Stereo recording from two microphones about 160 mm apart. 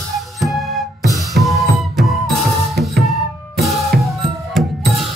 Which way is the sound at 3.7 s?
Centre (ahead or behind).